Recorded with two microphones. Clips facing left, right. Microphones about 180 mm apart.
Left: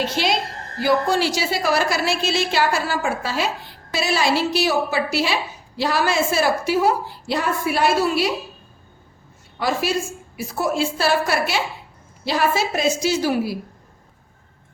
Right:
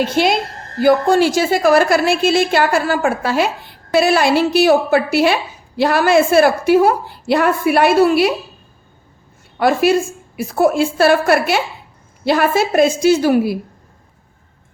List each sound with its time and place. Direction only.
0.0 s a woman's voice: 55° right (ahead or behind)
9.6 s a woman's voice: 60° right (ahead or behind)